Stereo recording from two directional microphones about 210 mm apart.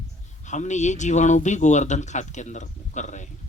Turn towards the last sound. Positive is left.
turn(degrees=35)  # may be behind; listen again after turning